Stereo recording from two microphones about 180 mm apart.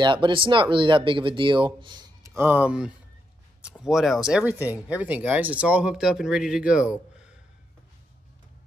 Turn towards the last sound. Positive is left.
turn(degrees=-5)  # may be behind; listen again after turning